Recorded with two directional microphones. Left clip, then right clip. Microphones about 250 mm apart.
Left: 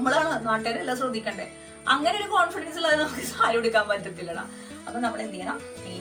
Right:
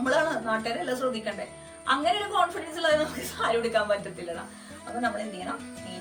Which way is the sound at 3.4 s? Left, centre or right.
Centre.